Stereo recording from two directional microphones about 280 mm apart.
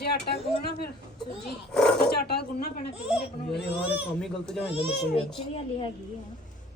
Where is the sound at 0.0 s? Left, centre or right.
Left.